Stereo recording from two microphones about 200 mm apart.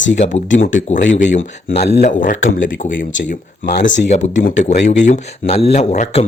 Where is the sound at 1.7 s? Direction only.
35° left (ahead or behind).